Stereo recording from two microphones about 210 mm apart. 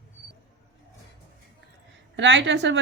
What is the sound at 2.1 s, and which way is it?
Speech, 60° right (ahead or behind).